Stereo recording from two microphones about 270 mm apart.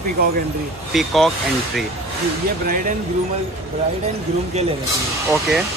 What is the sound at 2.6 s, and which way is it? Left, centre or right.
Speech, right.